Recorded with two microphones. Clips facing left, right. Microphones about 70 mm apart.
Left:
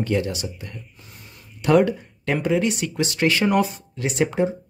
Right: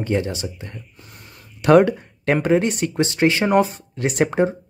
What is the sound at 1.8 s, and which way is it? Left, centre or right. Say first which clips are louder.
Speech: right 3 dB; right.